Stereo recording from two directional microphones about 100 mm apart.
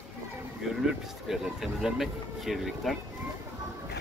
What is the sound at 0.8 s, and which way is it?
Speech, 5° right (ahead or behind).